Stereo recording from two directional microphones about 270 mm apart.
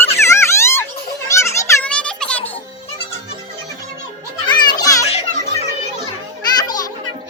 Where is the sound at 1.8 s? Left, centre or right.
Centre.